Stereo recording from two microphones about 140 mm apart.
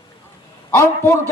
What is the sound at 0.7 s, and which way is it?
Speech, 20° left (ahead or behind).